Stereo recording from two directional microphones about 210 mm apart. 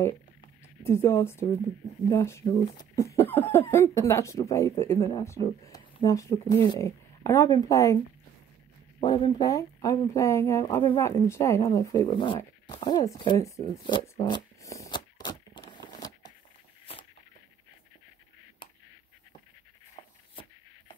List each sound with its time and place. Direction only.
0.8 s speech: 10° left (ahead or behind)
9.0 s speech: 20° left (ahead or behind)
16.9 s a sound: 25° left (ahead or behind)